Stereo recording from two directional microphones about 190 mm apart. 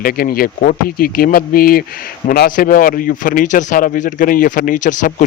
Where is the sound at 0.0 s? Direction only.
50° left (ahead or behind).